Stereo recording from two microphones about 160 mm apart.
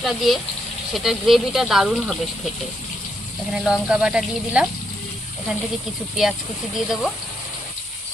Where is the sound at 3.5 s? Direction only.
5° right (ahead or behind).